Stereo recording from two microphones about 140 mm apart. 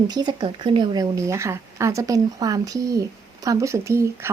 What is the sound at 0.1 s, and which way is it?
Speech, 30° right (ahead or behind).